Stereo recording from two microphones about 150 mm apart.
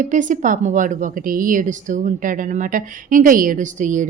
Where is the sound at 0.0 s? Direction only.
55° right (ahead or behind).